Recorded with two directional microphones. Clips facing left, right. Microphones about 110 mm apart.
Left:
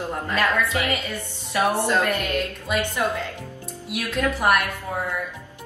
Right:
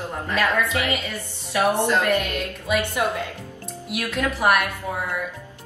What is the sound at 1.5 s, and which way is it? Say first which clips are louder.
A woman's voice: right 1 dB; 15° right (ahead or behind).